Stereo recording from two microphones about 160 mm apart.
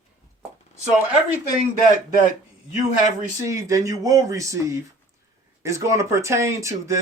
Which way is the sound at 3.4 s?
20° right (ahead or behind).